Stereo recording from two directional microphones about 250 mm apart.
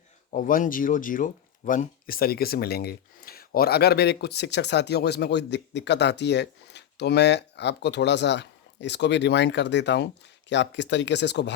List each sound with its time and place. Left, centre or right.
0.3 s speech: left